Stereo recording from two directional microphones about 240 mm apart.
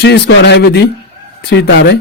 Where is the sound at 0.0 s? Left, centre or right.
Left.